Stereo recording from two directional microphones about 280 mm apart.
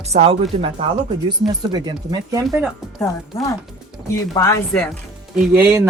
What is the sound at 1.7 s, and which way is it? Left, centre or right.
Speech, centre.